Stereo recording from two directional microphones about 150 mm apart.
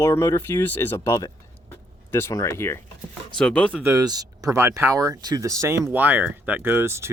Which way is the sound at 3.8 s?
20° right (ahead or behind).